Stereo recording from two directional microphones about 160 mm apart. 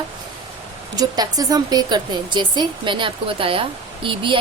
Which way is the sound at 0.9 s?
25° right (ahead or behind).